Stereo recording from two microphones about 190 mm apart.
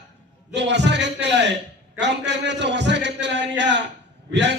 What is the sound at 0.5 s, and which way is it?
A man's voice, 65° right (ahead or behind).